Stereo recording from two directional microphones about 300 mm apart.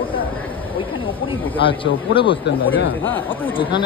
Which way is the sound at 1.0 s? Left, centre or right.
Centre.